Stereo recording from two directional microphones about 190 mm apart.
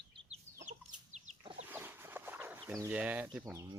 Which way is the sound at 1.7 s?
10° right (ahead or behind).